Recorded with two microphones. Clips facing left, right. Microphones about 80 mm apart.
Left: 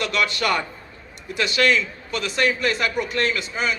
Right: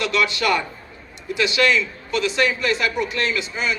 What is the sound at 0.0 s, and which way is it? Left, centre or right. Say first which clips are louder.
A man's voice: right 2 dB; left.